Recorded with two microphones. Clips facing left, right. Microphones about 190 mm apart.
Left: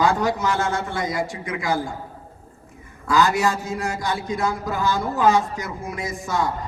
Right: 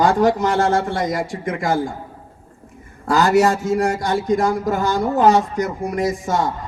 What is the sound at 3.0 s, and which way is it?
Speech, 45° right (ahead or behind).